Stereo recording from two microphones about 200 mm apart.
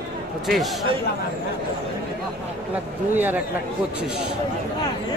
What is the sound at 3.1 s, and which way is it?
Speech, 10° right (ahead or behind).